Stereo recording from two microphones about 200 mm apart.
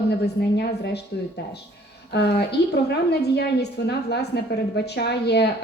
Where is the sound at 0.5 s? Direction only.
55° left (ahead or behind).